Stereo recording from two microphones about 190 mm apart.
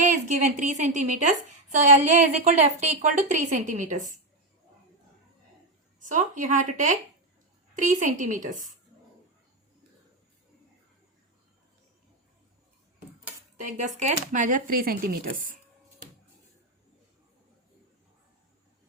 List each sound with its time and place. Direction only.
0.0 s a woman's voice: 40° right (ahead or behind)
6.1 s a woman's voice: 40° right (ahead or behind)
13.6 s speech: 40° right (ahead or behind)